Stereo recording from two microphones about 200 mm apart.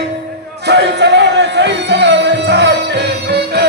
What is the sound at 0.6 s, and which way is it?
Music, 60° right (ahead or behind).